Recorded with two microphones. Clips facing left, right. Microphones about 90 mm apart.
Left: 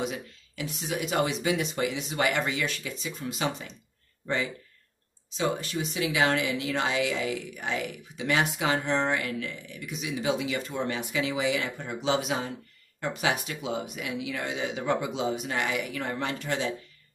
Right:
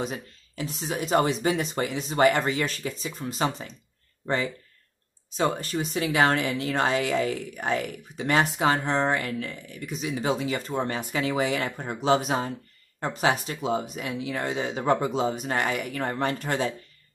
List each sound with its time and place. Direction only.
0.0 s a woman's voice: 40° right (ahead or behind)
5.3 s a woman's voice: 45° right (ahead or behind)